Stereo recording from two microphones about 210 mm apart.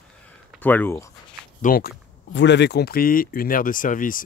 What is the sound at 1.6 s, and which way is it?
Speech, 45° left (ahead or behind).